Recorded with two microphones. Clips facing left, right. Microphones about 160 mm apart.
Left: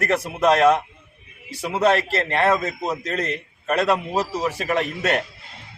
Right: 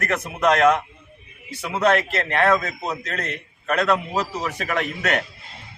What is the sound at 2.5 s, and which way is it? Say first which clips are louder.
Speech: even; 10° left (ahead or behind).